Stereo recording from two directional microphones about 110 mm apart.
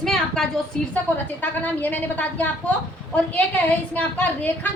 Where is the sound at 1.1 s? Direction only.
15° left (ahead or behind).